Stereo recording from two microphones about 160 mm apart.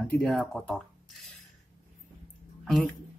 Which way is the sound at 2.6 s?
Centre (ahead or behind).